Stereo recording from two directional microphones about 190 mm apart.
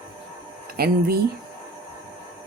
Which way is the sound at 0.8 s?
55° right (ahead or behind).